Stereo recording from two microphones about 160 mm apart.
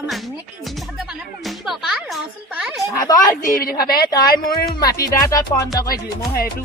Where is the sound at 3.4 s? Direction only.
70° left (ahead or behind).